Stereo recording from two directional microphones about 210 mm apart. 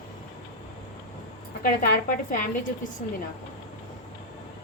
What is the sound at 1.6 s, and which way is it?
Speech, 40° left (ahead or behind).